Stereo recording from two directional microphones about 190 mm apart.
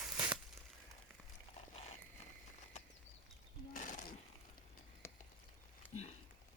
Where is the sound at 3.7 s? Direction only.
45° left (ahead or behind).